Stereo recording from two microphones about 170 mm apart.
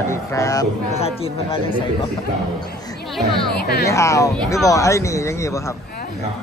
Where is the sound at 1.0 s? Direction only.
35° left (ahead or behind).